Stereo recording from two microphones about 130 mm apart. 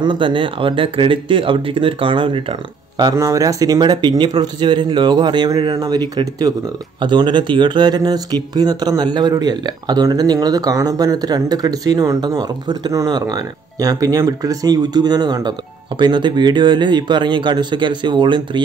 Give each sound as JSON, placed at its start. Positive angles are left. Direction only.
{"t": 0.0, "sound": "speech", "side_deg": -40}
{"t": 3.0, "sound": "speech", "side_deg": -30}